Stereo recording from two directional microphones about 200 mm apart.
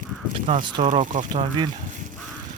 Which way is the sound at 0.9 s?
40° right (ahead or behind).